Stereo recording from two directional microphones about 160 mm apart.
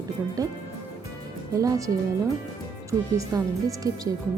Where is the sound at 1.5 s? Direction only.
20° right (ahead or behind).